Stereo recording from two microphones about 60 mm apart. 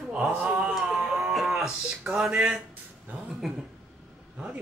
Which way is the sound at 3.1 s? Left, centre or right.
Right.